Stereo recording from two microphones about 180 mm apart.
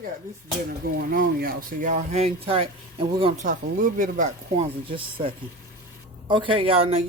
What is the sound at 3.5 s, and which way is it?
Speech, 45° right (ahead or behind).